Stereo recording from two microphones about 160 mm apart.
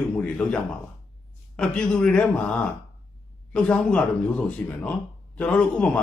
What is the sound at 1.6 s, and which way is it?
Speech, 5° left (ahead or behind).